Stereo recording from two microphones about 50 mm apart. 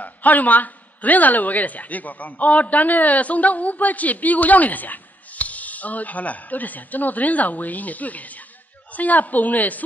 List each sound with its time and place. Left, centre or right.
0.0 s a woman's voice: left